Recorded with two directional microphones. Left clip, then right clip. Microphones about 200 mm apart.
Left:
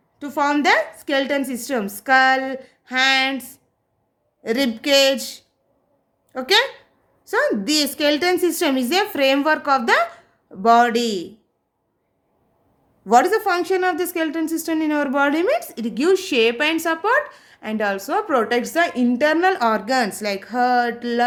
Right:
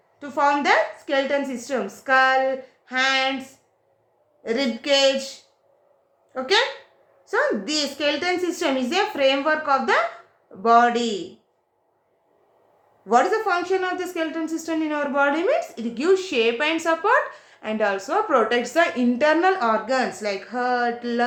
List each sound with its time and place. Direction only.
0.2 s speech: 55° left (ahead or behind)
4.4 s a woman's voice: 55° left (ahead or behind)
6.3 s a woman's voice: 55° left (ahead or behind)
13.1 s speech: 55° left (ahead or behind)